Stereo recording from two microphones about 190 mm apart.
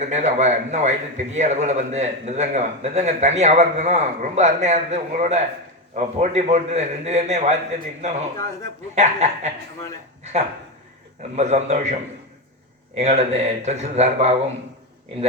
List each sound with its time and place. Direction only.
0.0 s a man's voice: 40° right (ahead or behind)
9.0 s a man's voice: 35° right (ahead or behind)
11.2 s a man's voice: 35° right (ahead or behind)